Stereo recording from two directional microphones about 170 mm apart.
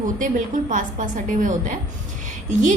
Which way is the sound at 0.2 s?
50° right (ahead or behind).